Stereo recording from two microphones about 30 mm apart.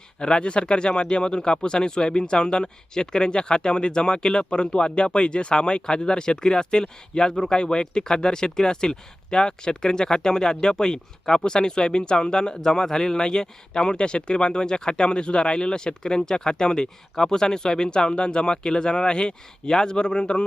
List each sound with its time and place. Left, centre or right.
0.2 s speech: left